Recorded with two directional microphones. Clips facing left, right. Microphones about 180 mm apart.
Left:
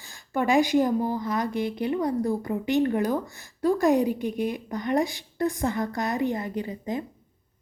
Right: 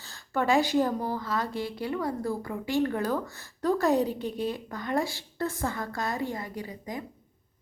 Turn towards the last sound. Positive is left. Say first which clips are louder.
# left 6 dB
turn(degrees=25)  # may be behind; listen again after turning